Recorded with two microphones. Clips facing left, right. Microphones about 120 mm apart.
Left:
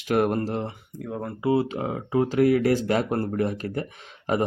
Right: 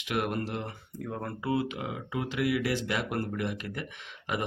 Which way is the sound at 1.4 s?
30° left (ahead or behind).